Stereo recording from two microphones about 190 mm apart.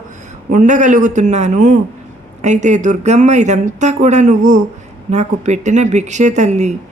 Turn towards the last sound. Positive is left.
turn(degrees=-35)  # may be behind; listen again after turning